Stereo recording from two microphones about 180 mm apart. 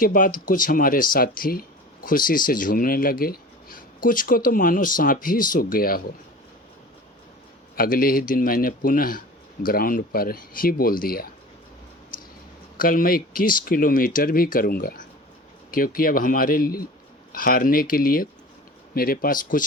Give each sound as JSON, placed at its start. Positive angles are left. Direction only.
{"t": 0.0, "sound": "speech", "side_deg": 50}
{"t": 7.8, "sound": "speech", "side_deg": 55}
{"t": 12.1, "sound": "a sound", "side_deg": 50}
{"t": 12.7, "sound": "speech", "side_deg": 50}